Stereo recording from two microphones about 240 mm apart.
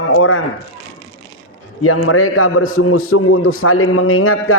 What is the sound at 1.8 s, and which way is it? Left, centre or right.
A man's voice, left.